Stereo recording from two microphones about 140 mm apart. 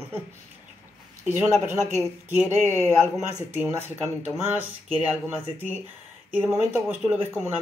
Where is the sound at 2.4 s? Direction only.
15° left (ahead or behind).